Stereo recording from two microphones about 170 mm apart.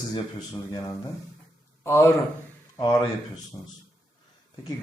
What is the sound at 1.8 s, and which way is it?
Speech, 15° left (ahead or behind).